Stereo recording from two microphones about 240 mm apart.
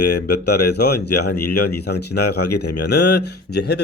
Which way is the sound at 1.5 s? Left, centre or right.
Left.